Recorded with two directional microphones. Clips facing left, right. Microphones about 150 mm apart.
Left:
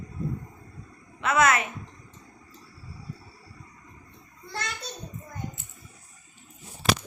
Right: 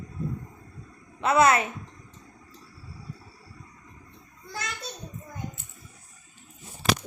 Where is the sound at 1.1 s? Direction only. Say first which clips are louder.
Right 2 dB; 30° right (ahead or behind).